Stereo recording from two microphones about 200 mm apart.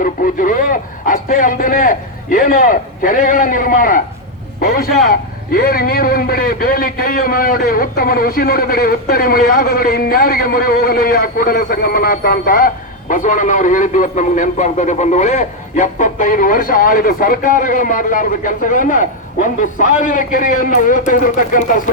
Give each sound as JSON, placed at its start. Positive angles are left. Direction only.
{"t": 0.0, "sound": "a man's voice", "side_deg": 45}